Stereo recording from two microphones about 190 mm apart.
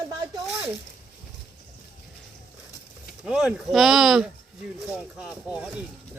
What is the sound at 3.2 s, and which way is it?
Speech, centre (ahead or behind).